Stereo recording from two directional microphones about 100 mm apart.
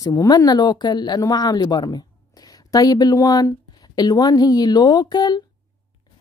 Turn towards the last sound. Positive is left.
turn(degrees=45)  # may be behind; listen again after turning